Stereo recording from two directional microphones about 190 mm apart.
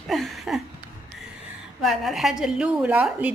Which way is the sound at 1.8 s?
Centre (ahead or behind).